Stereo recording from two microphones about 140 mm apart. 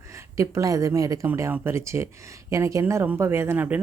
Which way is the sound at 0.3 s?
25° right (ahead or behind).